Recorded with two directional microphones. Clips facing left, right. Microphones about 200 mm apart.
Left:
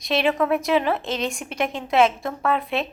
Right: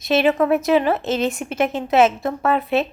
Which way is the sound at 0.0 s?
5° right (ahead or behind).